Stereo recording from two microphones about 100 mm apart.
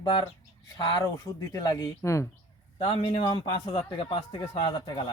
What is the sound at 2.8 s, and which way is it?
A man's voice, 60° left (ahead or behind).